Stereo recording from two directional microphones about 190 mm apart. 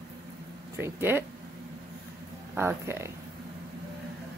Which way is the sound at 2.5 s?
15° right (ahead or behind).